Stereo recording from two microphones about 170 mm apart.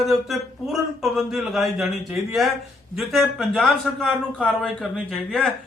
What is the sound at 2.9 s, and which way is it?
Speech, centre (ahead or behind).